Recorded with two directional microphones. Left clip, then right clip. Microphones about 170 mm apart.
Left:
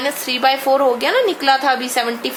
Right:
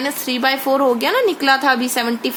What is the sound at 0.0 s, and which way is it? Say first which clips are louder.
A woman's voice: left 2 dB; 35° right (ahead or behind).